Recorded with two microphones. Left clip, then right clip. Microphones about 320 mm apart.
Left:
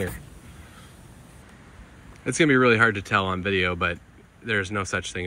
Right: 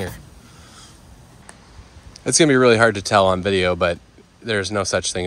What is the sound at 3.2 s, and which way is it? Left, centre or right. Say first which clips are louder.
Speech: right 7 dB; centre.